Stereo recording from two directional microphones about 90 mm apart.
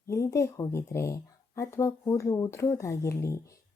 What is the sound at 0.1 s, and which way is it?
Speech, 35° left (ahead or behind).